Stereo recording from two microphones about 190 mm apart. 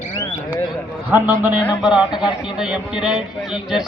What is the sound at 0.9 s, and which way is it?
A man's voice, 10° right (ahead or behind).